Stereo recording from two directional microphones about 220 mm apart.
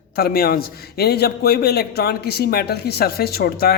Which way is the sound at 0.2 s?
45° left (ahead or behind).